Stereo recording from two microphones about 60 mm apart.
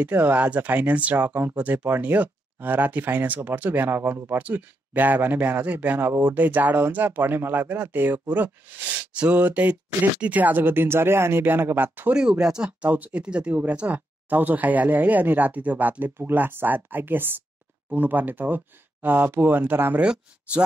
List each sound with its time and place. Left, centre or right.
0.0 s speech: right
4.4 s speech: right
5.9 s speech: right
12.1 s speech: centre
12.9 s speech: right
20.0 s speech: centre